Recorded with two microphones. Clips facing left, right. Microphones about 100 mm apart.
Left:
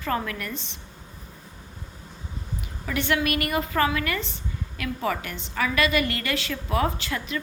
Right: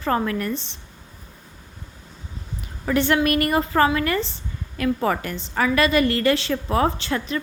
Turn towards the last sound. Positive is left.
turn(degrees=-30)  # may be behind; listen again after turning